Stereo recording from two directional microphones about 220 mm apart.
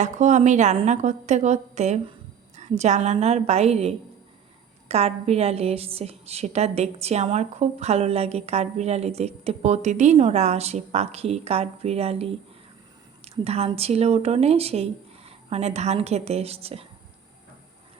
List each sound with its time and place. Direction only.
0.0 s a woman's voice: 30° right (ahead or behind)